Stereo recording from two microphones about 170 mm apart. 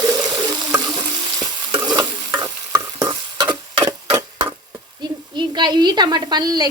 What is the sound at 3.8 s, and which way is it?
Clock, 25° right (ahead or behind).